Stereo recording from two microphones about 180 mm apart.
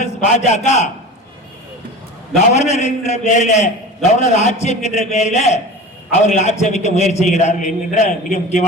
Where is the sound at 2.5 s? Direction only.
40° left (ahead or behind).